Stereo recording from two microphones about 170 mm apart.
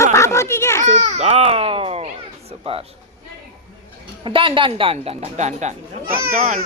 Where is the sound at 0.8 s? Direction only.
40° right (ahead or behind).